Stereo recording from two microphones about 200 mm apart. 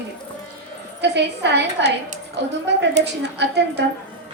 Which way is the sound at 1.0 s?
60° right (ahead or behind).